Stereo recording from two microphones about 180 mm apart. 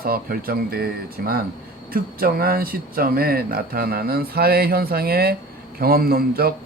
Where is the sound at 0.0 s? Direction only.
55° right (ahead or behind).